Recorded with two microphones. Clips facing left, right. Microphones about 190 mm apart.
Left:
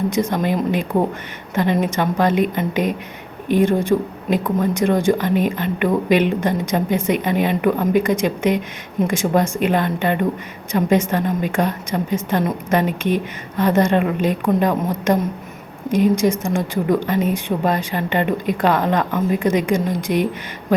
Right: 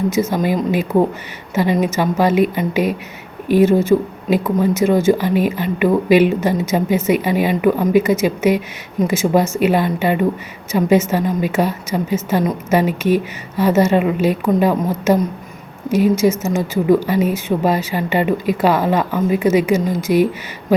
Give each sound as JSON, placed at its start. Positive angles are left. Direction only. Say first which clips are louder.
{"t": 0.1, "sound": "a woman's voice", "louder": "right 2 dB", "side_deg": -5}